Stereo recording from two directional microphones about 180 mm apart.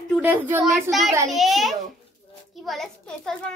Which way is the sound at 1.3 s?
Centre (ahead or behind).